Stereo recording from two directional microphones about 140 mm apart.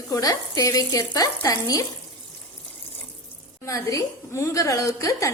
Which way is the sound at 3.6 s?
20° left (ahead or behind).